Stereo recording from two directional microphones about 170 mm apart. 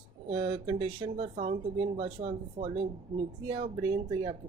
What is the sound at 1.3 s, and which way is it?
Speech, 35° right (ahead or behind).